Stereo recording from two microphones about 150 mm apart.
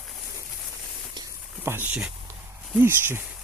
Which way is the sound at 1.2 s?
20° right (ahead or behind).